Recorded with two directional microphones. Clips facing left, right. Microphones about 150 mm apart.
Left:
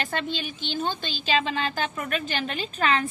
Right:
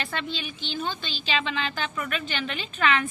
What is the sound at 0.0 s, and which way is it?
A woman's voice, 45° left (ahead or behind).